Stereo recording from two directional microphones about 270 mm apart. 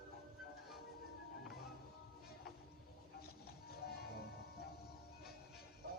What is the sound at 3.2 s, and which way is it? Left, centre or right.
Music, left.